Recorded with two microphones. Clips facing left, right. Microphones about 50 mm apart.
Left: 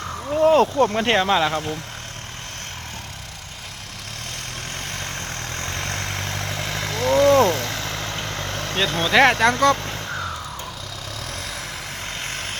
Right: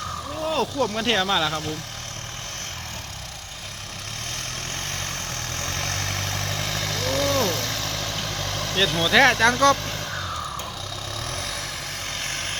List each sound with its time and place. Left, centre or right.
0.4 s speech: left
4.9 s vehicle: centre
9.0 s speech: centre
12.2 s vehicle: centre